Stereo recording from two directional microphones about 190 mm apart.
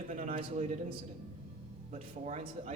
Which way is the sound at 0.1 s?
40° right (ahead or behind).